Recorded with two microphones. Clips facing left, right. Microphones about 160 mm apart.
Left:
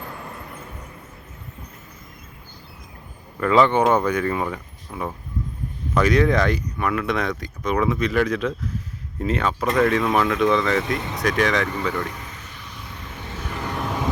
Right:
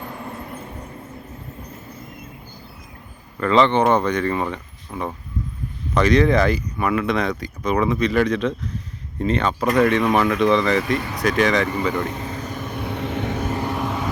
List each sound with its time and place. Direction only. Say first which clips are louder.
3.4 s speech: right 1 dB; 5° left (ahead or behind); by 12.2 s 20° right (ahead or behind)
12.2 s vehicle: right 11 dB; 35° right (ahead or behind); by 13.5 s 65° right (ahead or behind)
13.7 s vehicle: right 2 dB; centre (ahead or behind)